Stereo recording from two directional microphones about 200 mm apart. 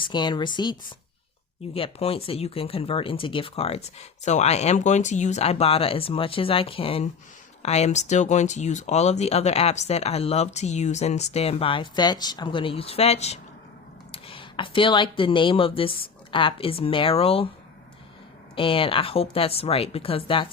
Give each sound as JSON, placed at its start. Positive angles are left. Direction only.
{"t": 0.0, "sound": "speech", "side_deg": 25}
{"t": 18.5, "sound": "speech", "side_deg": 25}